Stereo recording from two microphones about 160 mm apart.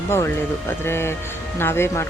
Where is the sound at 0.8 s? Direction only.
15° left (ahead or behind).